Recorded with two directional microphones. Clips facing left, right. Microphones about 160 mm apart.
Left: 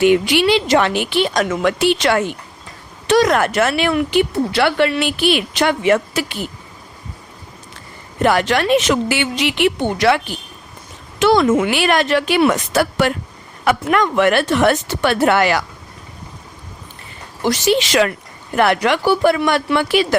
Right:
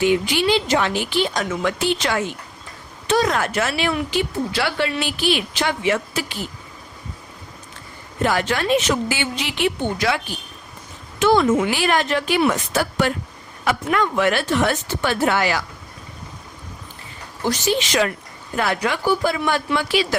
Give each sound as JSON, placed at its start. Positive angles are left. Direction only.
{"t": 0.0, "sound": "a woman's voice", "side_deg": 70}
{"t": 3.1, "sound": "speech", "side_deg": 75}
{"t": 8.2, "sound": "a woman's voice", "side_deg": 70}
{"t": 11.2, "sound": "a woman's voice", "side_deg": 90}
{"t": 17.4, "sound": "speech", "side_deg": 90}
{"t": 18.5, "sound": "speech", "side_deg": 70}